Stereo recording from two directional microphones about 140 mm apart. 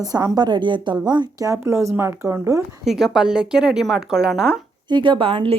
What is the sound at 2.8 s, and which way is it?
Speech, centre (ahead or behind).